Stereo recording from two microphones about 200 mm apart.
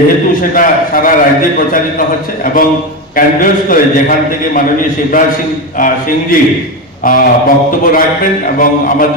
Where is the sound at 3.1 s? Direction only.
45° left (ahead or behind).